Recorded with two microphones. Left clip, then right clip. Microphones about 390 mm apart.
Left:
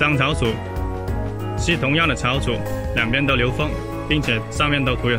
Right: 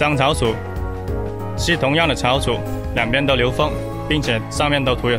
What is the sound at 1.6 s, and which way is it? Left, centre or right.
Speech, centre.